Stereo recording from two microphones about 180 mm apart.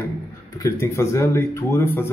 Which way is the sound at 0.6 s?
15° left (ahead or behind).